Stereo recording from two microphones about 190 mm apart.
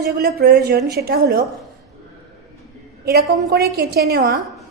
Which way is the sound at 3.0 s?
55° right (ahead or behind).